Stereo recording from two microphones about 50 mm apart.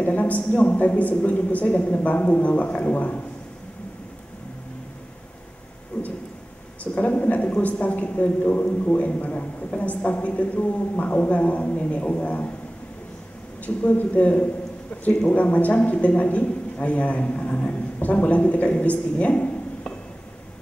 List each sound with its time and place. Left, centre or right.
0.0 s a man's voice: left
5.9 s a sound: left
6.8 s a man's voice: left
13.8 s a man's voice: left